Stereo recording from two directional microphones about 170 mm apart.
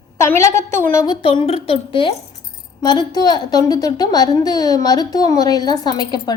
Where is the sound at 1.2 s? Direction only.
30° left (ahead or behind).